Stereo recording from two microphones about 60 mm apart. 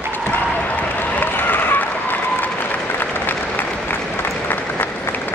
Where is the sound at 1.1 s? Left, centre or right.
Left.